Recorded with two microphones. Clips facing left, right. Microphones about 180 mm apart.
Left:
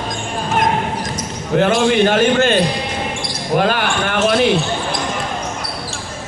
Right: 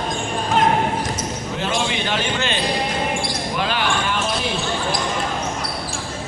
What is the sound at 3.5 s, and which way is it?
Basketball bounce, 50° left (ahead or behind).